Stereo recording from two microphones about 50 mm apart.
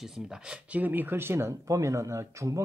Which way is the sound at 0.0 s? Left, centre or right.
Centre.